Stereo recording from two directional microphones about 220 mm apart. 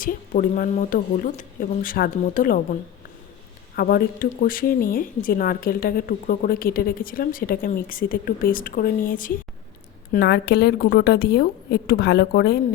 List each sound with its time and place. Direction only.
0.0 s a woman's voice: 40° left (ahead or behind)
3.8 s a woman's voice: 45° left (ahead or behind)